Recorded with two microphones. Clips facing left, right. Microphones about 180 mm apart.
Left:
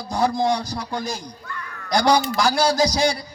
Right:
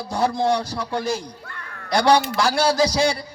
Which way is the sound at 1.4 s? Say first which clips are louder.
Left 4 dB; 55° right (ahead or behind).